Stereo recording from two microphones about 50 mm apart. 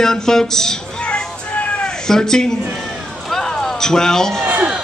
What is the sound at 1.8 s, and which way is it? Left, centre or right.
Cat, centre.